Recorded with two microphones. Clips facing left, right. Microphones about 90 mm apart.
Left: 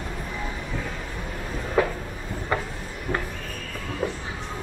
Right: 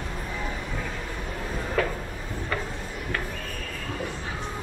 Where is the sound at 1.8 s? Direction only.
15° left (ahead or behind).